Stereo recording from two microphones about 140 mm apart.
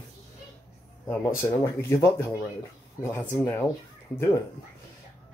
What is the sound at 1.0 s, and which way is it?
Speech, 15° left (ahead or behind).